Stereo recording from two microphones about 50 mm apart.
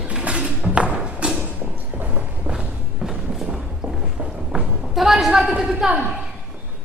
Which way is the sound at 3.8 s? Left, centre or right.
Right.